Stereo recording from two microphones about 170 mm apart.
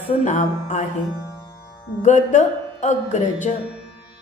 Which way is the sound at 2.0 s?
45° left (ahead or behind).